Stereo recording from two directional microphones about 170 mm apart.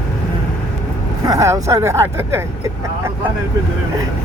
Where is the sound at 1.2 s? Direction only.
20° right (ahead or behind).